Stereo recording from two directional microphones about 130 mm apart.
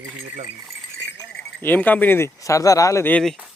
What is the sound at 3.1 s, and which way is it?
Speech, 5° left (ahead or behind).